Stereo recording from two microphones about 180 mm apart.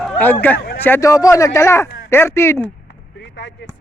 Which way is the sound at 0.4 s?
10° left (ahead or behind).